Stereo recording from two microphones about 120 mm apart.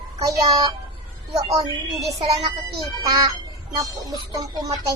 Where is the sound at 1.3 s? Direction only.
30° right (ahead or behind).